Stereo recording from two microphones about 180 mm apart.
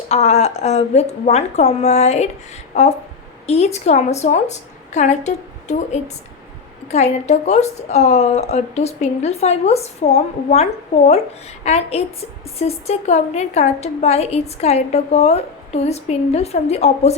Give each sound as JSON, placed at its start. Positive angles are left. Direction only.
{"t": 0.1, "sound": "a woman's voice", "side_deg": 35}